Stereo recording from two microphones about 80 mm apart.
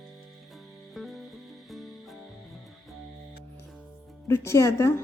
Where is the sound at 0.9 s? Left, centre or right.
Centre.